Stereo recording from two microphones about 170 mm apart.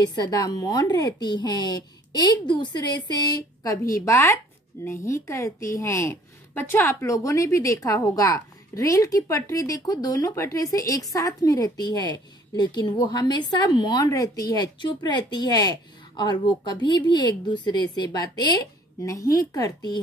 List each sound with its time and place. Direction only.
0.0 s a woman's voice: 25° left (ahead or behind)